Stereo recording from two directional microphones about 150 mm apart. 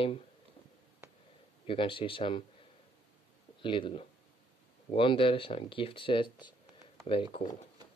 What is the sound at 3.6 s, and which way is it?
Speech, 35° left (ahead or behind).